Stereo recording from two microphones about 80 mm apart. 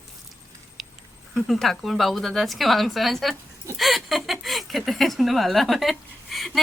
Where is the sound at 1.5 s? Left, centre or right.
Centre.